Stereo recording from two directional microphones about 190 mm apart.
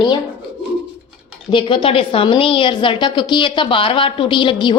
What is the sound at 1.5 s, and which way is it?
A woman's voice, 25° left (ahead or behind).